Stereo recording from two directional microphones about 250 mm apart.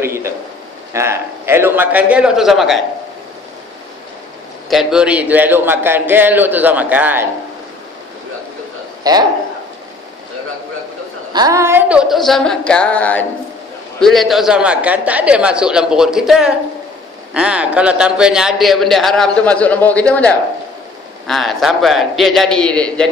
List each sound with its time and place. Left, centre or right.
0.0 s a man's voice: centre
4.6 s a man's voice: centre
9.0 s a man's voice: centre
11.3 s a man's voice: centre